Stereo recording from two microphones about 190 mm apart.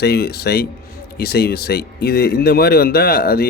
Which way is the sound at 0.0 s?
60° left (ahead or behind).